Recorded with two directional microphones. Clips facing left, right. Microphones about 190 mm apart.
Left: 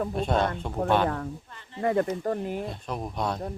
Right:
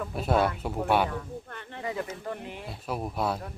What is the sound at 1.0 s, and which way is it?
Speech, 65° left (ahead or behind).